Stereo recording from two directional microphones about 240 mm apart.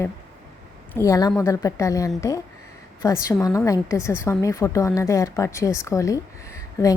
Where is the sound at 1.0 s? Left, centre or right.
Centre.